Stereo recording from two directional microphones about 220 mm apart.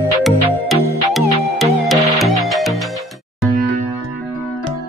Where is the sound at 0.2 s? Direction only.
Centre (ahead or behind).